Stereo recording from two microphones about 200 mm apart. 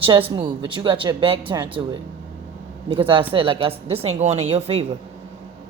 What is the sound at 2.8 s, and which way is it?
A woman's voice, 25° right (ahead or behind).